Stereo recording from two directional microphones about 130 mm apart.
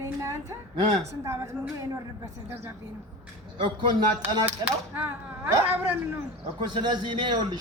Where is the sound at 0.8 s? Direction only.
40° right (ahead or behind).